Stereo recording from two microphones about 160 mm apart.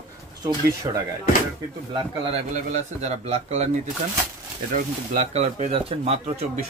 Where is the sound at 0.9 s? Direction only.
30° right (ahead or behind).